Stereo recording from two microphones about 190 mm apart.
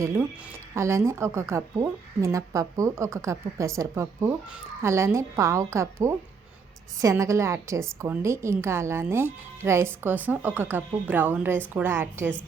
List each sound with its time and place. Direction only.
0.0 s a woman's voice: 15° right (ahead or behind)